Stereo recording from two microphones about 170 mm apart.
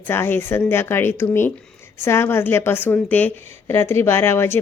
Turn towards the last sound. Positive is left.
turn(degrees=15)  # may be behind; listen again after turning